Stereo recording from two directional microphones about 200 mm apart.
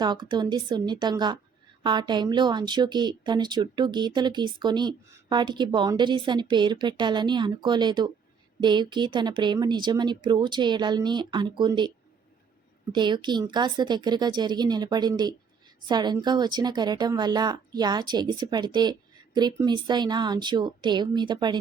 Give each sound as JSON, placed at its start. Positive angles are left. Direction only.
{"t": 0.0, "sound": "speech", "side_deg": -20}
{"t": 12.9, "sound": "speech", "side_deg": -25}